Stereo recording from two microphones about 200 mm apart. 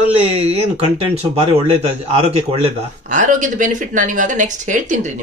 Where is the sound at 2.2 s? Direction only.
30° right (ahead or behind).